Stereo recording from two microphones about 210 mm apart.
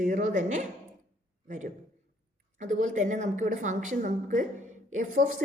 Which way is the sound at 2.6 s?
35° right (ahead or behind).